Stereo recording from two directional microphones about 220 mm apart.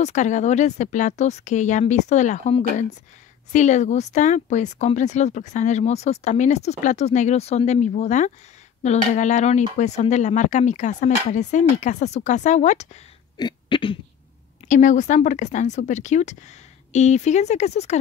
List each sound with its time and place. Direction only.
0.0 s speech: 35° left (ahead or behind)
13.4 s a sound: 20° left (ahead or behind)
14.7 s speech: 35° left (ahead or behind)